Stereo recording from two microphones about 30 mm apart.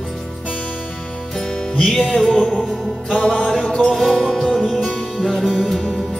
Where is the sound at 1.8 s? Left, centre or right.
Centre.